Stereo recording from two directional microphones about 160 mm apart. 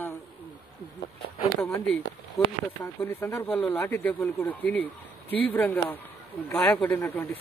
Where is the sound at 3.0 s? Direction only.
15° left (ahead or behind).